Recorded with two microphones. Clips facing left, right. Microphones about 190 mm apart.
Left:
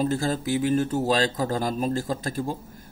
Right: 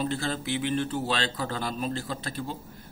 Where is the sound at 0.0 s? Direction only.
40° left (ahead or behind).